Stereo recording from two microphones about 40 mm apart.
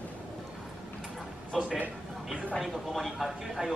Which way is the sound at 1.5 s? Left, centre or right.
Right.